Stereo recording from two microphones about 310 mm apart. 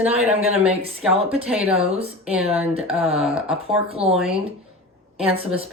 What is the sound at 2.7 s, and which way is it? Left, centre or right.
Speech, centre.